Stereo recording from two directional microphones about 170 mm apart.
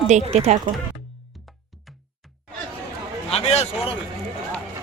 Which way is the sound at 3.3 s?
40° left (ahead or behind).